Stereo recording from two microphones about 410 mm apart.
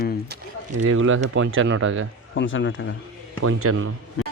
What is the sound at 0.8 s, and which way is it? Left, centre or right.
Speech, right.